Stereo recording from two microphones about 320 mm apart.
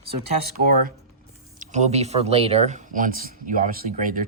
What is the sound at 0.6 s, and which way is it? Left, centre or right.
Speech, right.